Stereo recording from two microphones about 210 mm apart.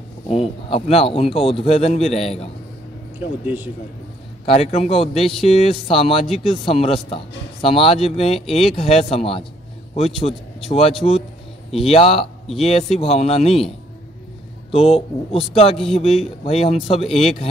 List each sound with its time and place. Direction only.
0.3 s a man's voice: 30° left (ahead or behind)
3.4 s speech: 10° right (ahead or behind)
4.5 s a man's voice: 30° left (ahead or behind)